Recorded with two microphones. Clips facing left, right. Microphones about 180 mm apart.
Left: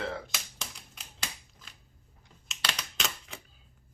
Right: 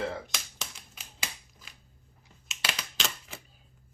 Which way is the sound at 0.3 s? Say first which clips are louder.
Right 1 dB; centre (ahead or behind).